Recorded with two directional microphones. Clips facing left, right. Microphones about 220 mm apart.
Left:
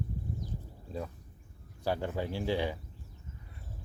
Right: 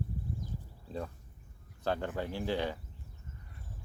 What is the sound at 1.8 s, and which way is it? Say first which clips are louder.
Speech: left 1 dB; 10° left (ahead or behind).